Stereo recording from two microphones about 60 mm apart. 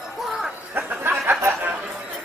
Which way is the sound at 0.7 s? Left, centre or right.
Right.